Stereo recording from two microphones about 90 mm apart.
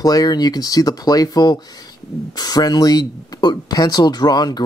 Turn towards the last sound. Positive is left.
turn(degrees=50)  # may be behind; listen again after turning